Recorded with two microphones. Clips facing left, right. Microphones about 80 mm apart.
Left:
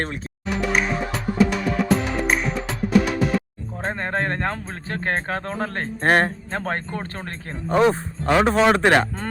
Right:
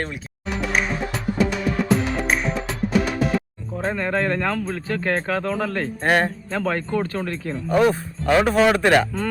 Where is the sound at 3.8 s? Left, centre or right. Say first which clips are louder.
Right 2 dB; left.